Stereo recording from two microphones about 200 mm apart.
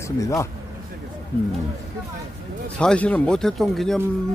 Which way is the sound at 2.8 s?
5° left (ahead or behind).